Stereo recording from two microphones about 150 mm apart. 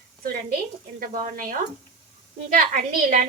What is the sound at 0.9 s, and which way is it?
A woman's voice, 65° right (ahead or behind).